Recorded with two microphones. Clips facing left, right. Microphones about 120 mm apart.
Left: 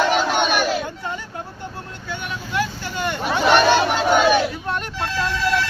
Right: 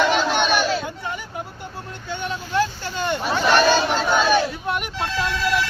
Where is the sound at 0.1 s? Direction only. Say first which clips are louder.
Left 1 dB; 10° left (ahead or behind).